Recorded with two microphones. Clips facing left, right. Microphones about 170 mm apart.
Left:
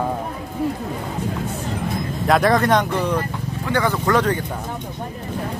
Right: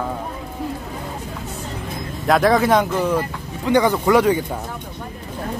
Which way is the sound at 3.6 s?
15° right (ahead or behind).